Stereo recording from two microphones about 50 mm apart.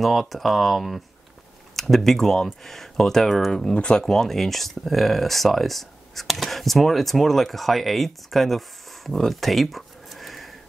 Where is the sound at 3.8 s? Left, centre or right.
Centre.